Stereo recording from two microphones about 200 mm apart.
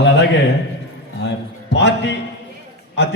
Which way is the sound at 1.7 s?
60° left (ahead or behind).